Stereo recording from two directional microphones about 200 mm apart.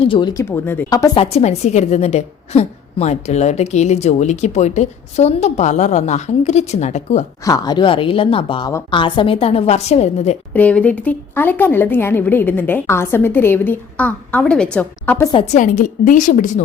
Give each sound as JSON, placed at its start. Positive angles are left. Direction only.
{"t": 0.0, "sound": "speech", "side_deg": 25}
{"t": 1.2, "sound": "a woman's voice", "side_deg": 30}
{"t": 7.4, "sound": "a woman's voice", "side_deg": 20}
{"t": 10.5, "sound": "speech", "side_deg": 5}
{"t": 15.5, "sound": "a woman's voice", "side_deg": 40}